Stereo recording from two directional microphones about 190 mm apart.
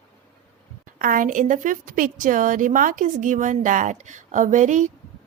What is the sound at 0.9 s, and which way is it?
A woman's voice, 45° right (ahead or behind).